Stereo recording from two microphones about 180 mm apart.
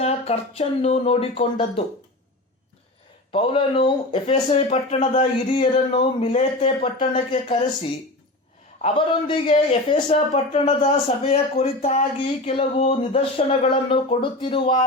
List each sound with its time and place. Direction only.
0.0 s speech: 35° left (ahead or behind)
3.3 s speech: 30° left (ahead or behind)
8.8 s speech: 30° left (ahead or behind)